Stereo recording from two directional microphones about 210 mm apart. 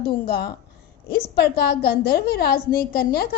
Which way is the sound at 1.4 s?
50° left (ahead or behind).